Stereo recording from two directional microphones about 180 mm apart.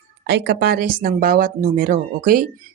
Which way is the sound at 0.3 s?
70° right (ahead or behind).